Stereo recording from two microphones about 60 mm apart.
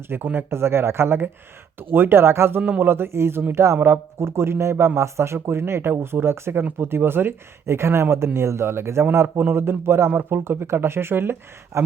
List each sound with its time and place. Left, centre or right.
0.1 s speech: right
0.5 s speech: right
2.6 s speech: right